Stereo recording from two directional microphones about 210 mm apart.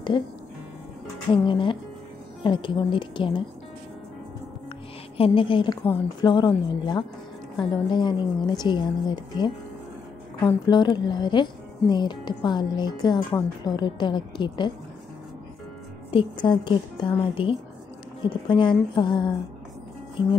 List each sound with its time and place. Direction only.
1.3 s speech: 25° left (ahead or behind)
5.1 s speech: 25° left (ahead or behind)
16.4 s speech: 25° left (ahead or behind)